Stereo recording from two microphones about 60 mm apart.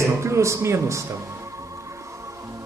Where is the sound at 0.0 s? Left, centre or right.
Right.